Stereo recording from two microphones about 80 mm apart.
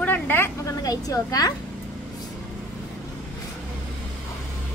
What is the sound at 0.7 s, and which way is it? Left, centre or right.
Speech, left.